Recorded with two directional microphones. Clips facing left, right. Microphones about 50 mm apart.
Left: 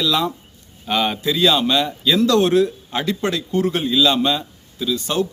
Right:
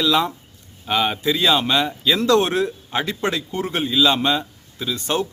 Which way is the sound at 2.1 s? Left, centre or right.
Right.